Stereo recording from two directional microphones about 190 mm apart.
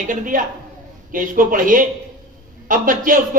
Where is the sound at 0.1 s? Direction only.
45° right (ahead or behind).